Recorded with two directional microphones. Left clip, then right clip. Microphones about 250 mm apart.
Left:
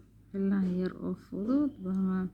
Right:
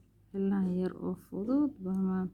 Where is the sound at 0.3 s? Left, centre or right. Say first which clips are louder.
Left 1 dB; centre.